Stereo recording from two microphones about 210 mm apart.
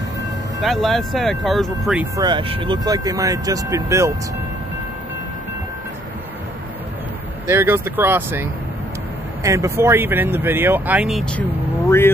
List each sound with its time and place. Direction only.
0.6 s speech: centre (ahead or behind)
2.1 s speech: 20° right (ahead or behind)
7.4 s speech: 10° right (ahead or behind)